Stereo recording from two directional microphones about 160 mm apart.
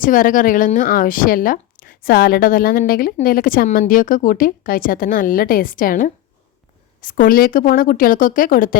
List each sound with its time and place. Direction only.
0.0 s speech: 60° left (ahead or behind)